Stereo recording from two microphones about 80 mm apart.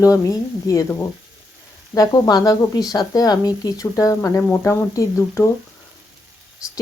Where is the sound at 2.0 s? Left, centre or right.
Left.